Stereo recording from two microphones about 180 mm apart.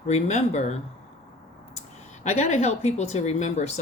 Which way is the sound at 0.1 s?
40° left (ahead or behind).